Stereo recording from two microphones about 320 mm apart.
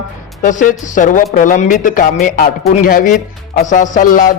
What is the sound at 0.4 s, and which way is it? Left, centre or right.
A man's voice, left.